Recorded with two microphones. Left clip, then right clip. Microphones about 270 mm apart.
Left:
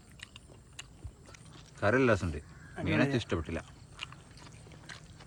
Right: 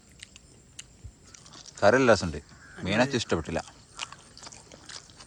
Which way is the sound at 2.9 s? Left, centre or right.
Right.